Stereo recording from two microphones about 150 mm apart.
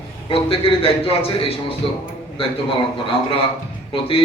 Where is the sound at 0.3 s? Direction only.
40° left (ahead or behind).